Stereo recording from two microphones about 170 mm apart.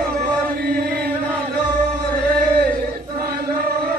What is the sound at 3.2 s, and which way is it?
Chant, 60° right (ahead or behind).